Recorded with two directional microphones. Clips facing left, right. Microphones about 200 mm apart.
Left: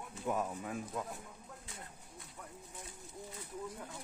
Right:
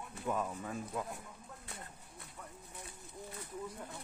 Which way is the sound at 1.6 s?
60° right (ahead or behind).